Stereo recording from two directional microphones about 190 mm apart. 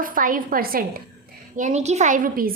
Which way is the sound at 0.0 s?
45° right (ahead or behind).